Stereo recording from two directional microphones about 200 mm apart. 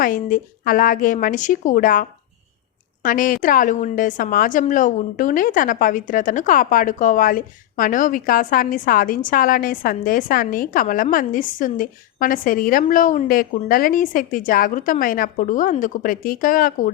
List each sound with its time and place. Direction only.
0.0 s a woman's voice: 40° left (ahead or behind)